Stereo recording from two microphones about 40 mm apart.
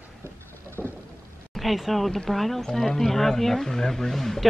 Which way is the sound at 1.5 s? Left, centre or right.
Centre.